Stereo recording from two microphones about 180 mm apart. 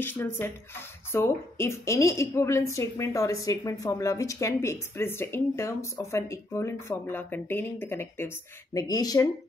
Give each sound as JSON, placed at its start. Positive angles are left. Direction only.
{"t": 0.0, "sound": "a woman's voice", "side_deg": 10}